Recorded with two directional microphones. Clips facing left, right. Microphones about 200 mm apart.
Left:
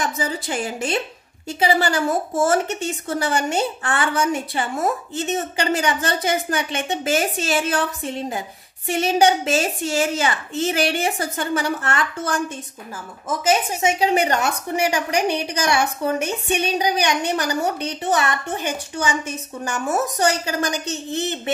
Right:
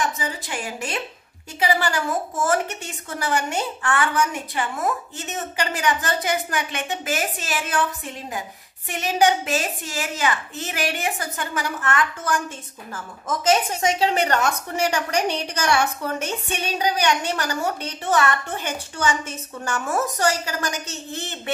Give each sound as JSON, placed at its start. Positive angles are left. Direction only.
{"t": 0.5, "sound": "a woman's voice", "side_deg": 30}
{"t": 13.4, "sound": "a woman's voice", "side_deg": 10}